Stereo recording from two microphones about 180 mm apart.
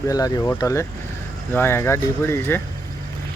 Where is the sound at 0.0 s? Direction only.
20° left (ahead or behind).